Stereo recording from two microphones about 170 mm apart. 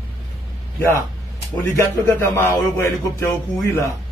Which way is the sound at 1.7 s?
15° left (ahead or behind).